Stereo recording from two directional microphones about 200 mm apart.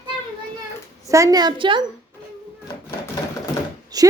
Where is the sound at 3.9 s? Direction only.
20° right (ahead or behind).